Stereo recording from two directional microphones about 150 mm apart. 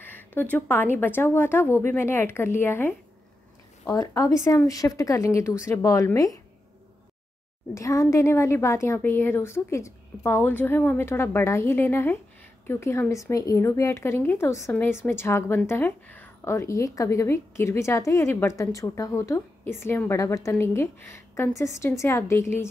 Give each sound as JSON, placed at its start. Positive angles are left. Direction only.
{"t": 0.0, "sound": "speech", "side_deg": 10}
{"t": 3.9, "sound": "a woman's voice", "side_deg": 20}
{"t": 7.7, "sound": "a woman's voice", "side_deg": 20}